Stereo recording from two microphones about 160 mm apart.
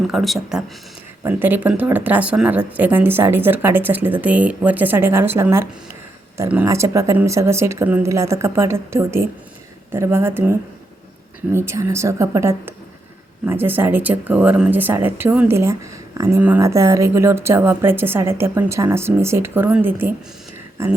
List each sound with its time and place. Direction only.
0.1 s speech: centre (ahead or behind)
1.2 s speech: 10° right (ahead or behind)